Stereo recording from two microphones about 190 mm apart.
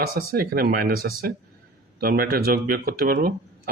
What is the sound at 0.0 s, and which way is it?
Speech, 50° right (ahead or behind).